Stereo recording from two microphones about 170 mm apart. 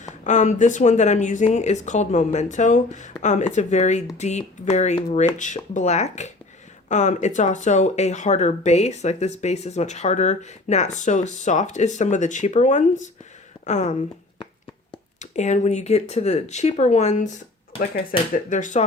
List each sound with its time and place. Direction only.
0.3 s speech: 45° left (ahead or behind)
15.2 s speech: 45° left (ahead or behind)